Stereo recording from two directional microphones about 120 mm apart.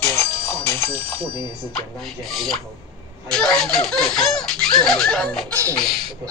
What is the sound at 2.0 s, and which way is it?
Laughter, centre (ahead or behind).